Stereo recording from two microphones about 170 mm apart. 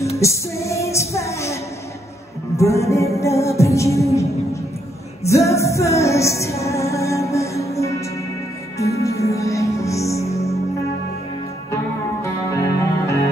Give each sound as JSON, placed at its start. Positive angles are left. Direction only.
{"t": 0.1, "sound": "music", "side_deg": 15}
{"t": 11.7, "sound": "music", "side_deg": 20}